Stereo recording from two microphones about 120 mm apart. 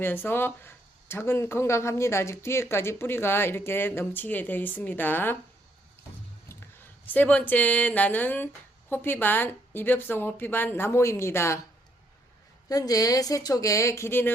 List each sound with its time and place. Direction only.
0.0 s speech: 15° left (ahead or behind)
6.5 s a woman's voice: 15° left (ahead or behind)
12.6 s speech: 30° left (ahead or behind)